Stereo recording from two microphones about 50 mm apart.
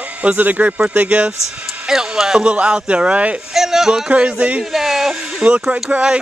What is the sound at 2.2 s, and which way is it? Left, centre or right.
Speech, centre.